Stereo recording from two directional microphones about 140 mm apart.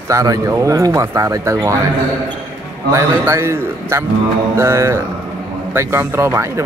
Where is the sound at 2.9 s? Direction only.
20° right (ahead or behind).